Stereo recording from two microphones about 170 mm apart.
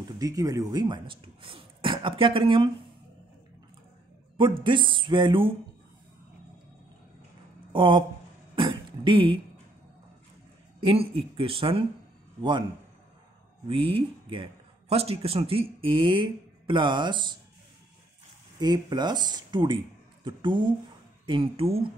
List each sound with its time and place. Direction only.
0.2 s speech: 20° right (ahead or behind)
4.6 s speech: 30° right (ahead or behind)
7.7 s speech: 30° right (ahead or behind)
8.5 s a sound: 30° right (ahead or behind)
10.8 s speech: 35° right (ahead or behind)
13.7 s speech: 30° right (ahead or behind)
18.6 s speech: 25° right (ahead or behind)